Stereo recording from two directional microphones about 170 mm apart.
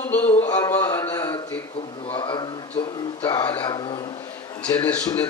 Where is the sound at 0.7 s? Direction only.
15° left (ahead or behind).